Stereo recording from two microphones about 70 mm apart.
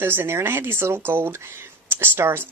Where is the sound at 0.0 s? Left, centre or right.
Right.